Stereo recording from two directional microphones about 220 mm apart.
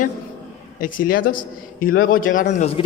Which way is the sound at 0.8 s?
40° left (ahead or behind).